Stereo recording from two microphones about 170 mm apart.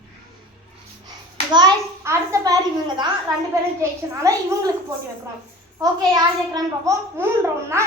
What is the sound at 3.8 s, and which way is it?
Speech, 20° right (ahead or behind).